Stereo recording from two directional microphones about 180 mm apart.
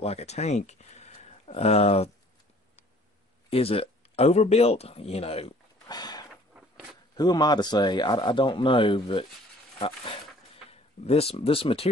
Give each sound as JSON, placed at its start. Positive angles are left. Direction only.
{"t": 0.0, "sound": "speech", "side_deg": 35}
{"t": 3.4, "sound": "speech", "side_deg": 30}
{"t": 5.9, "sound": "a sound", "side_deg": 20}
{"t": 7.2, "sound": "speech", "side_deg": 20}